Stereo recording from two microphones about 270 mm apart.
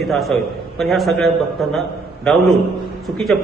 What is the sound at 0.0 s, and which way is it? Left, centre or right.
A man's voice, centre.